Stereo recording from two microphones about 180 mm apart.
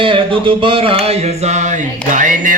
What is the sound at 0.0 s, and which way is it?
Music, 30° right (ahead or behind).